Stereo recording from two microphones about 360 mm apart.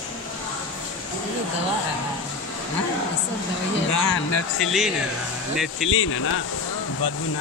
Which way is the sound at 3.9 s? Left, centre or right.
Left.